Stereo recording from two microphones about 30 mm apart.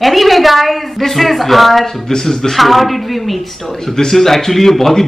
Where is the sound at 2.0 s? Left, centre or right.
Centre.